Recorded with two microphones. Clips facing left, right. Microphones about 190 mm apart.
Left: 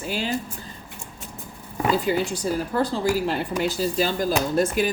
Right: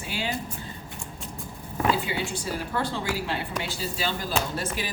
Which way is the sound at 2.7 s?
40° left (ahead or behind).